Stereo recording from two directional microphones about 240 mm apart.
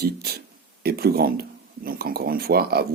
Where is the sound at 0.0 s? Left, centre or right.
Right.